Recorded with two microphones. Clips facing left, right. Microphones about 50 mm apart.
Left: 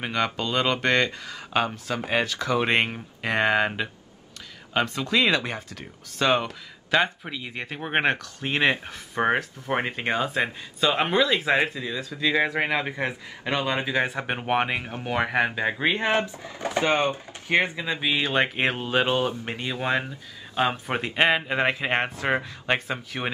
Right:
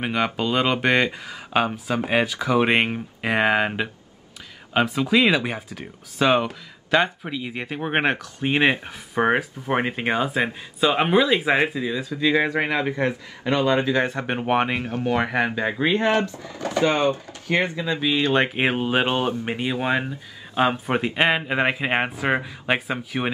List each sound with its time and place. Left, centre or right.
0.0 s speech: centre
14.9 s speech: centre
15.1 s speech: centre
16.1 s speech: left; by 23.3 s centre